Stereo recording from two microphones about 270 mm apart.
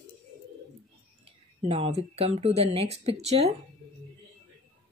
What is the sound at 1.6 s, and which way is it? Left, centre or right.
Speech, right.